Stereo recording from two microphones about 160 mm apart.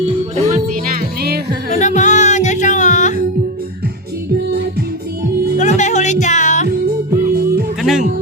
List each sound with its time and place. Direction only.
0.5 s music: 70° right (ahead or behind)
1.7 s music: 50° left (ahead or behind)
5.5 s music: 50° left (ahead or behind)
7.9 s speech: 5° right (ahead or behind)